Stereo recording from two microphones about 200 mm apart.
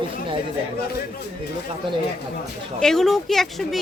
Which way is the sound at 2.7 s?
Centre (ahead or behind).